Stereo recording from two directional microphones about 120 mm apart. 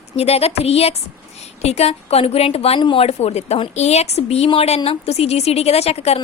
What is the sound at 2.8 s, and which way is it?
Speech, 45° left (ahead or behind).